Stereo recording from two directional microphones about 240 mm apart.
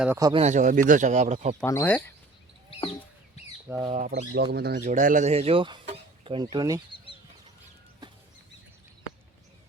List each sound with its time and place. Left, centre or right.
0.0 s speech: centre
0.4 s speech: right
1.6 s speech: centre
3.7 s speech: centre
3.9 s speech: right; by 6.8 s centre
6.9 s chicken: left